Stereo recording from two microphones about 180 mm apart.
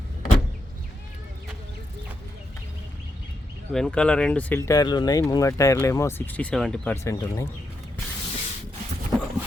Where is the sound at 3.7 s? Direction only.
5° left (ahead or behind).